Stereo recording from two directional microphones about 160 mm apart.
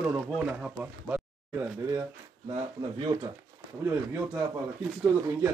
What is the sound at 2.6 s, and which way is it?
Speech, 30° right (ahead or behind).